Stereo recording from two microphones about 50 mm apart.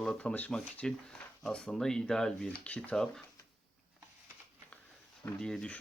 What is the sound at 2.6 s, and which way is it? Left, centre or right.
Speech, left.